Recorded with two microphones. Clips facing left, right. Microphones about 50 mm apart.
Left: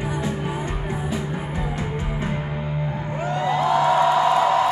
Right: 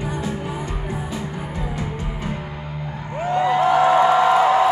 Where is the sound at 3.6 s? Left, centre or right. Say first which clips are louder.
Right 2 dB; right.